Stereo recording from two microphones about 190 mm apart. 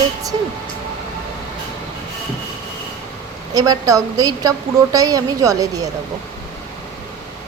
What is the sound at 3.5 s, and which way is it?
A woman's voice, 20° right (ahead or behind).